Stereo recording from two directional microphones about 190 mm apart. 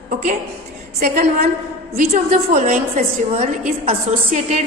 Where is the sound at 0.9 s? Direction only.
50° right (ahead or behind).